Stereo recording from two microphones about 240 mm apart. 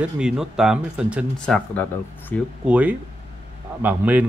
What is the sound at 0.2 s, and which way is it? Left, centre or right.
Speech, centre.